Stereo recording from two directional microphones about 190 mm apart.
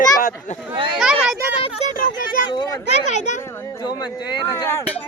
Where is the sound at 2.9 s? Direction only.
35° left (ahead or behind).